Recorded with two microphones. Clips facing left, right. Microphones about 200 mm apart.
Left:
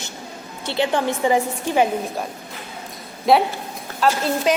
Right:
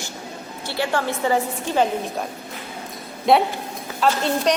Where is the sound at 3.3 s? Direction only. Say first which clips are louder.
Left 1 dB; centre (ahead or behind).